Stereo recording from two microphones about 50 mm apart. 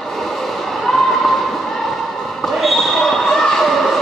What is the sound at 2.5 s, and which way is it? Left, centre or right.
Basketball bounce, centre.